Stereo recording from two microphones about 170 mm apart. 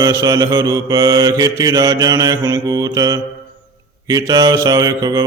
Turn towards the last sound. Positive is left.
turn(degrees=-20)  # may be behind; listen again after turning